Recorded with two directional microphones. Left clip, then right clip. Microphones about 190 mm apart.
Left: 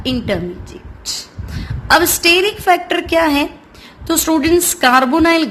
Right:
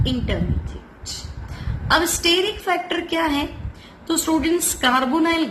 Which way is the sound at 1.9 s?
45° left (ahead or behind).